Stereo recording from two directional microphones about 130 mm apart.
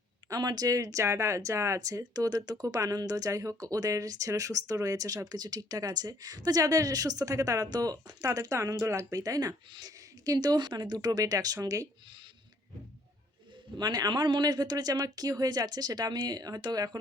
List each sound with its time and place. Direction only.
0.3 s speech: 30° right (ahead or behind)
13.7 s speech: 30° right (ahead or behind)